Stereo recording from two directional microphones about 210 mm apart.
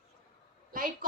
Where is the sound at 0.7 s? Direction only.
40° right (ahead or behind).